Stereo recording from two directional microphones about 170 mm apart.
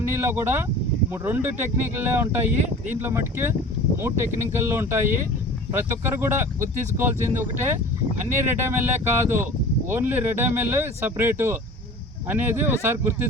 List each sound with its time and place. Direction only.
0.1 s speech: 15° right (ahead or behind)
6.1 s speech: 15° right (ahead or behind)